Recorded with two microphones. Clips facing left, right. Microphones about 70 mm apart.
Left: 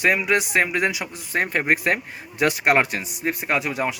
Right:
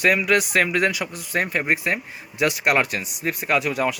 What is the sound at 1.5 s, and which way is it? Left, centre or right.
Speech, left.